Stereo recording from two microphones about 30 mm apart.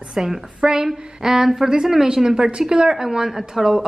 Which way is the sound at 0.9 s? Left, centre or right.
Centre.